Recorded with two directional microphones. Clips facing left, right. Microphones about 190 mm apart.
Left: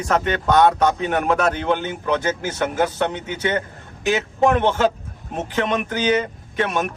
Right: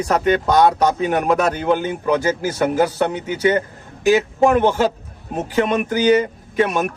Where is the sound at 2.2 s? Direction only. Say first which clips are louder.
Right 4 dB; 35° right (ahead or behind).